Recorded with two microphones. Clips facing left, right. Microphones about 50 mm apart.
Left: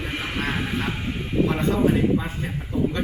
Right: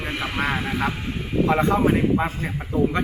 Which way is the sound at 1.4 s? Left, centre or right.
Right.